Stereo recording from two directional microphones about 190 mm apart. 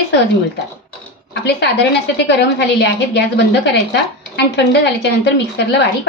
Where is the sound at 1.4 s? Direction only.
65° left (ahead or behind).